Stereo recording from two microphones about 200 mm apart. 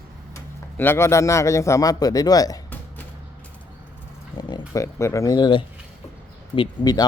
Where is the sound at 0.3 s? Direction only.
10° left (ahead or behind).